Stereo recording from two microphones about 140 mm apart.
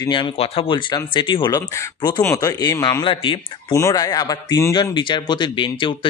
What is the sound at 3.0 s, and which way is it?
Speech, 40° left (ahead or behind).